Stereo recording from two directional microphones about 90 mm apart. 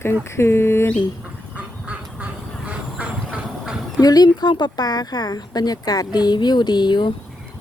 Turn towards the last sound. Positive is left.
turn(degrees=55)  # may be behind; listen again after turning